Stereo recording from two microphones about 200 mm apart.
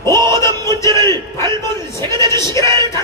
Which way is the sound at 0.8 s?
15° left (ahead or behind).